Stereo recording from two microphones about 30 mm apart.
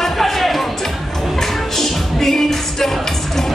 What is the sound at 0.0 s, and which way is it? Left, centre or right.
Music, centre.